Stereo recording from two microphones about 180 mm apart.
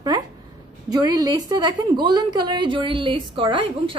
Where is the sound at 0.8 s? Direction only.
20° right (ahead or behind).